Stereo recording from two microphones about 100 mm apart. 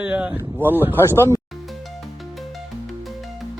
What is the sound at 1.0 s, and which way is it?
Speech, 25° left (ahead or behind).